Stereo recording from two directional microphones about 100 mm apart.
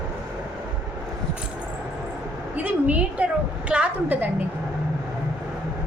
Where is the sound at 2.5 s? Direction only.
15° right (ahead or behind).